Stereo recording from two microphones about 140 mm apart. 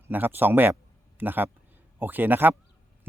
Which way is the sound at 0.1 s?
15° right (ahead or behind).